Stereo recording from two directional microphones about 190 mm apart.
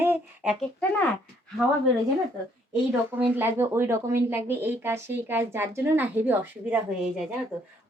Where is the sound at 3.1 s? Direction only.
10° right (ahead or behind).